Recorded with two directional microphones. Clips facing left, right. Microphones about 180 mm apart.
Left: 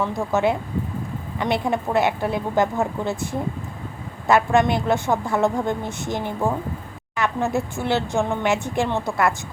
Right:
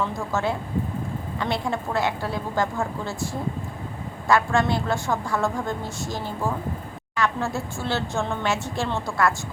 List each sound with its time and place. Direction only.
0.0 s a woman's voice: 15° left (ahead or behind)
4.3 s a woman's voice: 20° left (ahead or behind)